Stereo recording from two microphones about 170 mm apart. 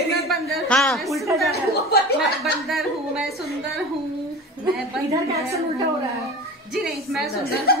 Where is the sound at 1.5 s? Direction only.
70° left (ahead or behind).